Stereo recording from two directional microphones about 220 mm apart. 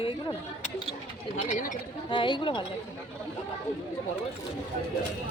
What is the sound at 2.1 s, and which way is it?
Speech, 20° left (ahead or behind).